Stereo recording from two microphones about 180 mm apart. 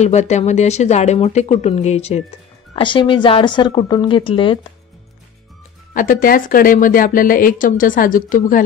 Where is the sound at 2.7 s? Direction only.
30° left (ahead or behind).